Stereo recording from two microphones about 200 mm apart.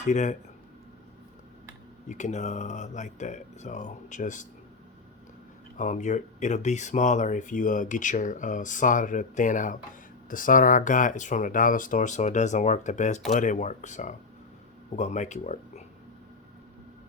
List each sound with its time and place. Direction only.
0.0 s speech: 35° left (ahead or behind)
2.0 s speech: 35° left (ahead or behind)
5.7 s speech: 40° left (ahead or behind)